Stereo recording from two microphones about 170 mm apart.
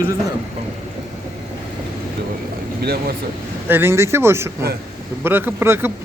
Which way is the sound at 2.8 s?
65° right (ahead or behind).